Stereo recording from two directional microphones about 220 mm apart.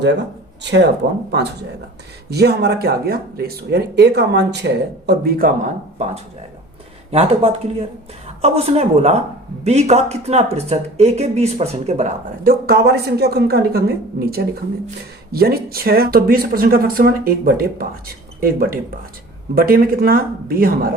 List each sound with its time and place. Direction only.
0.0 s speech: 50° right (ahead or behind)
2.3 s speech: 45° right (ahead or behind)
7.1 s speech: 25° right (ahead or behind)
12.6 s speech: 45° right (ahead or behind)